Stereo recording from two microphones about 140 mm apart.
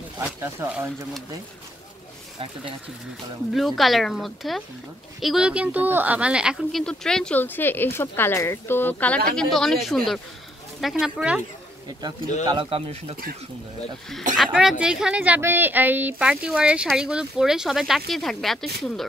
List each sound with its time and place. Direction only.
0.2 s speech: 15° right (ahead or behind)
3.5 s speech: centre (ahead or behind)
6.8 s speech: 5° left (ahead or behind)
12.4 s speech: 40° right (ahead or behind)
14.3 s speech: centre (ahead or behind)